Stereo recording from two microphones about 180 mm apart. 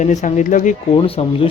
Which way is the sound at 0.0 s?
40° left (ahead or behind).